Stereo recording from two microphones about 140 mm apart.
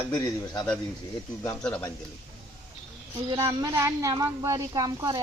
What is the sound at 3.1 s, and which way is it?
A woman's voice, 25° right (ahead or behind).